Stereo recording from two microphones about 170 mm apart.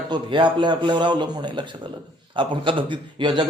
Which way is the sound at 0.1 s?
25° right (ahead or behind).